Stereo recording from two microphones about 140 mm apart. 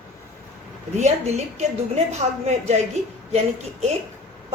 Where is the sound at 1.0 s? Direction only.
50° right (ahead or behind).